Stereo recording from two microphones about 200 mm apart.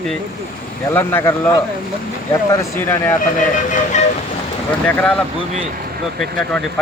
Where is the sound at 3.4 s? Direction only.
40° left (ahead or behind).